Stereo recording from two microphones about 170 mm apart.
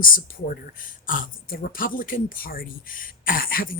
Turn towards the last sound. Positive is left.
turn(degrees=55)  # may be behind; listen again after turning